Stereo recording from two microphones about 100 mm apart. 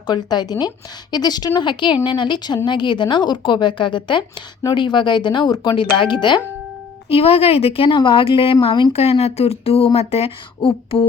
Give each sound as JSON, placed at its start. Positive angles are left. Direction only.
{"t": 0.1, "sound": "a woman's voice", "side_deg": 45}
{"t": 7.1, "sound": "a woman's voice", "side_deg": 80}
{"t": 8.9, "sound": "speech", "side_deg": 90}